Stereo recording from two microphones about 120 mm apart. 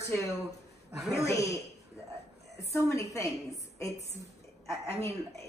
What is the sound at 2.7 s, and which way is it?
A woman's voice, 25° left (ahead or behind).